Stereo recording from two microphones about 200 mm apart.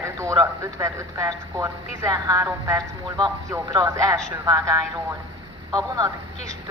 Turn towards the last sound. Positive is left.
turn(degrees=-20)  # may be behind; listen again after turning